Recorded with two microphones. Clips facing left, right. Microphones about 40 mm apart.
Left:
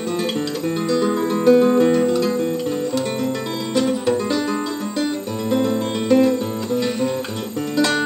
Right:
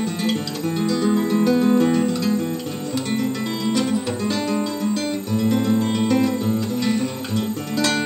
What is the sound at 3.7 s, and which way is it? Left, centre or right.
Music, centre.